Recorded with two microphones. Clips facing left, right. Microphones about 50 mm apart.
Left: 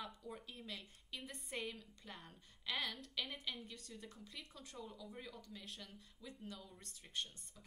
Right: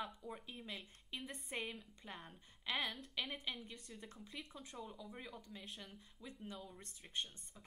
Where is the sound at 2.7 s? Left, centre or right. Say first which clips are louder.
Right 2 dB; centre.